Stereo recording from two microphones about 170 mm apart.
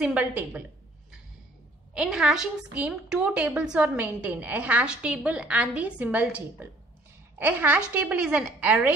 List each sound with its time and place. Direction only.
0.0 s a woman's voice: 10° right (ahead or behind)
2.0 s a woman's voice: 5° right (ahead or behind)